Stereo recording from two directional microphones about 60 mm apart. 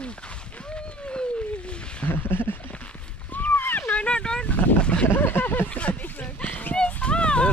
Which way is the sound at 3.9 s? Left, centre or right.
Left.